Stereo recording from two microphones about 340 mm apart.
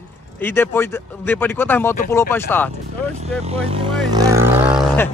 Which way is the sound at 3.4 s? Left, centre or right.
Centre.